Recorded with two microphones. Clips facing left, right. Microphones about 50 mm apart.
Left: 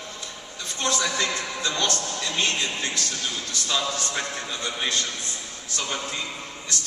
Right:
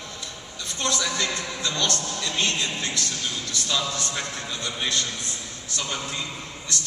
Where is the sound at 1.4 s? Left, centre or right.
Left.